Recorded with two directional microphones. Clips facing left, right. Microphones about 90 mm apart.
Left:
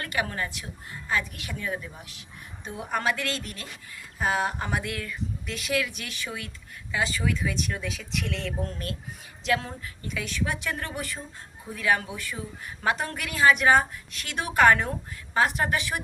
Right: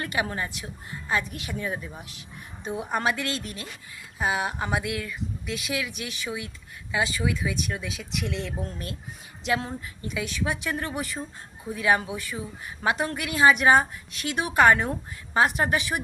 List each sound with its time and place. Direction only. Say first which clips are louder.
0.0 s a woman's voice: right 1 dB; 20° right (ahead or behind)
4.2 s a woman's voice: even; 10° right (ahead or behind)